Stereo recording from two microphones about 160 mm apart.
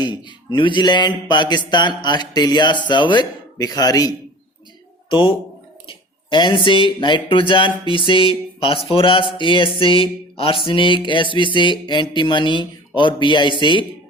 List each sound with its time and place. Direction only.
0.0 s speech: 30° left (ahead or behind)
5.9 s a sound: 30° left (ahead or behind)
13.0 s speech: 30° left (ahead or behind)